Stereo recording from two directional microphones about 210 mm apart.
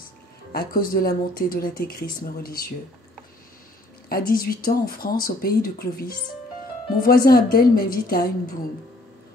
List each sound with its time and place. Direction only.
0.5 s speech: 45° left (ahead or behind)
4.1 s speech: 45° left (ahead or behind)